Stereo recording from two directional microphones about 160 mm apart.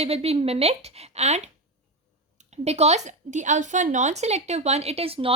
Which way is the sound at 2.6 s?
40° right (ahead or behind).